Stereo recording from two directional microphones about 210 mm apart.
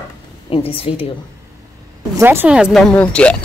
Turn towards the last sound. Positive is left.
turn(degrees=5)  # may be behind; listen again after turning